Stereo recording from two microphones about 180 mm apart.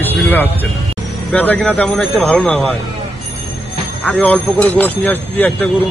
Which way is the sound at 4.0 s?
10° left (ahead or behind).